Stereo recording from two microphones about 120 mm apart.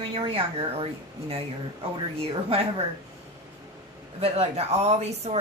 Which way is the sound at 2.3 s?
50° right (ahead or behind).